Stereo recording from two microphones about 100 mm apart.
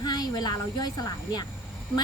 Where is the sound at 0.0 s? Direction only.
40° left (ahead or behind).